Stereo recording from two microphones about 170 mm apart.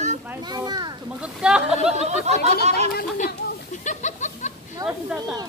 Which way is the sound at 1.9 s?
40° right (ahead or behind).